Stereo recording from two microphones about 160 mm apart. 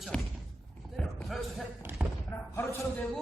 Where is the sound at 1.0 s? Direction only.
Centre (ahead or behind).